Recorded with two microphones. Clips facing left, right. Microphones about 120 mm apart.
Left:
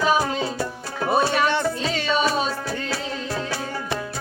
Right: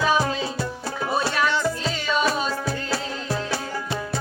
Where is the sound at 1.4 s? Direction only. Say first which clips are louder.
Left 1 dB; 60° left (ahead or behind).